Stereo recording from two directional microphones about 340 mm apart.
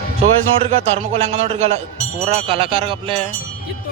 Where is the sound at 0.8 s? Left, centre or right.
Centre.